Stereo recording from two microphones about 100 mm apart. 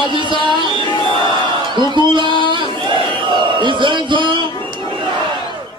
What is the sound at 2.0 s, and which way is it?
Speech, 50° right (ahead or behind).